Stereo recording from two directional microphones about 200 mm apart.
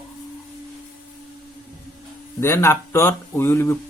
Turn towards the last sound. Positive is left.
turn(degrees=10)  # may be behind; listen again after turning